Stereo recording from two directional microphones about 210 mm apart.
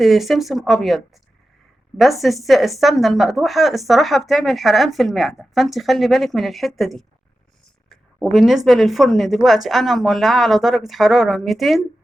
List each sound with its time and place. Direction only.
0.0 s a woman's voice: centre (ahead or behind)